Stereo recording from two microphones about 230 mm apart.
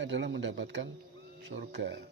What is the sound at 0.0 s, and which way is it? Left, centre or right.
A man's voice, right.